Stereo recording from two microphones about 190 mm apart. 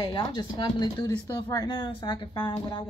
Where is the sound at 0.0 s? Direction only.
25° left (ahead or behind).